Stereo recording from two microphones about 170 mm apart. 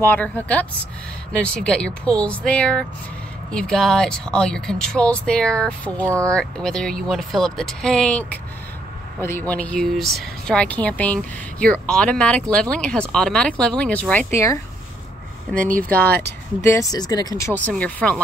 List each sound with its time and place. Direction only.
0.0 s speech: 10° left (ahead or behind)
6.0 s speech: 15° right (ahead or behind)
6.3 s speech: 5° left (ahead or behind)
15.5 s speech: 55° right (ahead or behind)
15.9 s speech: 10° left (ahead or behind)